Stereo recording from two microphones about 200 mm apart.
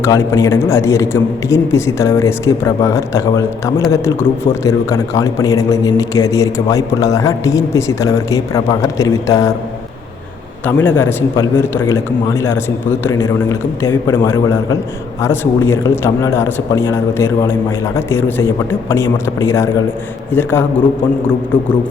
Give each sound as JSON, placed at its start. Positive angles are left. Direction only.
{"t": 0.0, "sound": "a man's voice", "side_deg": 15}
{"t": 10.7, "sound": "a man's voice", "side_deg": 10}